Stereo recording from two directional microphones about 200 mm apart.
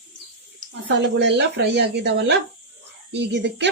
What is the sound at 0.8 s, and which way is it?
A woman's voice, 60° right (ahead or behind).